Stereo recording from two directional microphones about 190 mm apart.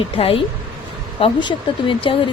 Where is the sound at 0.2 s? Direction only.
30° left (ahead or behind).